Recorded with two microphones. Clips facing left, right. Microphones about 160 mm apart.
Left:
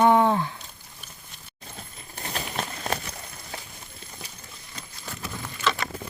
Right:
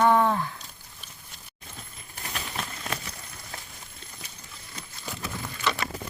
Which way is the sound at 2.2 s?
35° left (ahead or behind).